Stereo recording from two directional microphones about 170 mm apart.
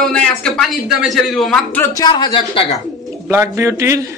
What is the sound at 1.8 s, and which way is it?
Speech, 20° left (ahead or behind).